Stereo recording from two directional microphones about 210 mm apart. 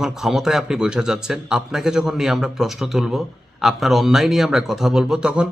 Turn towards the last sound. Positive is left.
turn(degrees=-5)  # may be behind; listen again after turning